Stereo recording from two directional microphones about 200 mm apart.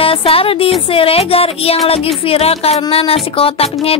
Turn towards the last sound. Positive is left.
turn(degrees=30)  # may be behind; listen again after turning